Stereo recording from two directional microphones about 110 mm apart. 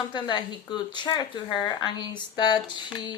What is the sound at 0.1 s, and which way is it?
Speech, 45° left (ahead or behind).